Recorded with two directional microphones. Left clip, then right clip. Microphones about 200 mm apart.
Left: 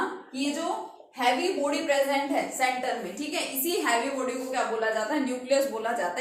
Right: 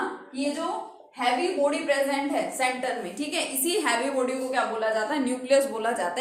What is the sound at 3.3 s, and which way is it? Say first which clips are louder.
Speech: right 2 dB; 40° right (ahead or behind).